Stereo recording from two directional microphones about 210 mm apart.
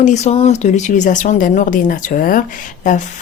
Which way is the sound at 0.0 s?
35° left (ahead or behind).